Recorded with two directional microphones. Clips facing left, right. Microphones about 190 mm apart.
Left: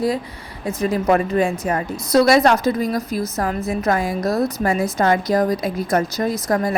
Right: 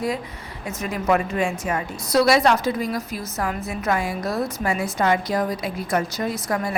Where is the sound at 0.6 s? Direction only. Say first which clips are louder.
Left 7 dB; 30° left (ahead or behind).